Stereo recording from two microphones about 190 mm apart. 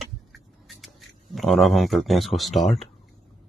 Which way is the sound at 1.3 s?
Centre (ahead or behind).